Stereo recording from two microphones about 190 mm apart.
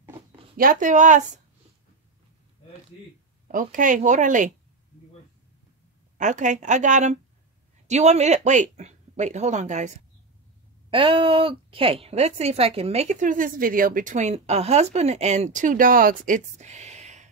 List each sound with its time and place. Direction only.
0.6 s speech: 45° right (ahead or behind)
3.5 s speech: 45° right (ahead or behind)
6.1 s a woman's voice: 40° right (ahead or behind)
10.9 s a woman's voice: 25° right (ahead or behind)